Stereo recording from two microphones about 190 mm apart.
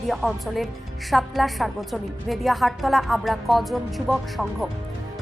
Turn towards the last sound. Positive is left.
turn(degrees=0)  # may be behind; listen again after turning